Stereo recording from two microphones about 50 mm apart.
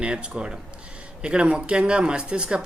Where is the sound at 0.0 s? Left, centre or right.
Centre.